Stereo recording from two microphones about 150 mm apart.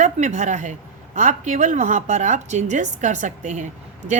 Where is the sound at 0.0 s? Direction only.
50° right (ahead or behind).